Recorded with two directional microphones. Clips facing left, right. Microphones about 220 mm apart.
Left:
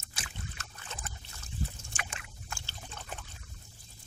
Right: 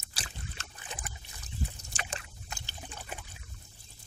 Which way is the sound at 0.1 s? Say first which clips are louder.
Even; 35° right (ahead or behind).